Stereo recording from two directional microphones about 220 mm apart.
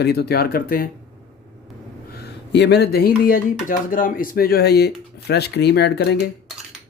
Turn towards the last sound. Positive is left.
turn(degrees=50)  # may be behind; listen again after turning